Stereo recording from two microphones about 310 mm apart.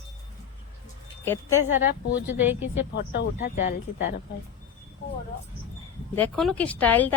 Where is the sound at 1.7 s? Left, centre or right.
Left.